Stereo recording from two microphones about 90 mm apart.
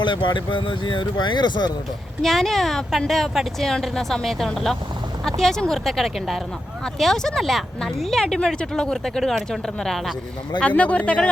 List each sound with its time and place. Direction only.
0.0 s speech: 60° left (ahead or behind)
2.2 s speech: 5° left (ahead or behind)
10.6 s speech: 15° left (ahead or behind)